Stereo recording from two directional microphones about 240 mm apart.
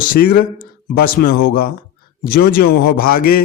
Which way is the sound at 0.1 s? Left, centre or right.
Left.